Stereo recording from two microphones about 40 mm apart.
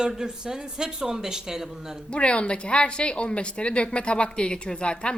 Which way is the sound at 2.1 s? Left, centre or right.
Left.